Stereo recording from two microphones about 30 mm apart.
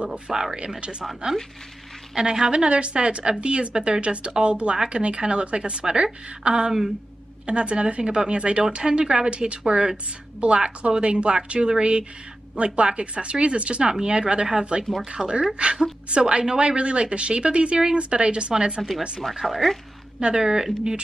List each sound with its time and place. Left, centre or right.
0.3 s speech: centre
0.7 s a woman's voice: right
2.1 s speech: centre
2.5 s a woman's voice: right
13.8 s speech: right
15.5 s a woman's voice: right
18.8 s speech: centre
20.2 s speech: right